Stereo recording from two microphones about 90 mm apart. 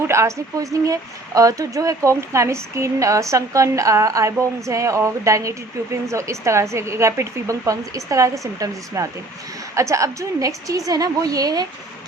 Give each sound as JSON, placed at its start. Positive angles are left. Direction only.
{"t": 0.1, "sound": "speech", "side_deg": -30}